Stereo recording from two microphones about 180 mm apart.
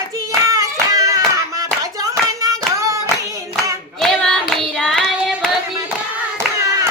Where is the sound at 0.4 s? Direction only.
20° right (ahead or behind).